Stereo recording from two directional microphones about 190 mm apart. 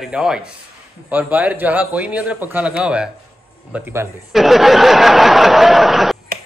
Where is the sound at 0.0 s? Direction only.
5° right (ahead or behind).